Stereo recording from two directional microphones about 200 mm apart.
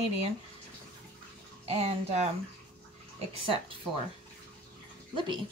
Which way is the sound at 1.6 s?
30° right (ahead or behind).